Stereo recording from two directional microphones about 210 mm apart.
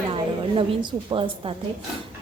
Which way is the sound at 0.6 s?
25° right (ahead or behind).